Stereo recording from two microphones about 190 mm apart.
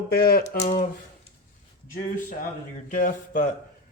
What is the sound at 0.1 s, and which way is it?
Speech, 55° left (ahead or behind).